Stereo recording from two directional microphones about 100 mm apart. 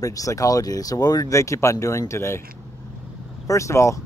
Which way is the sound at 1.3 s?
30° left (ahead or behind).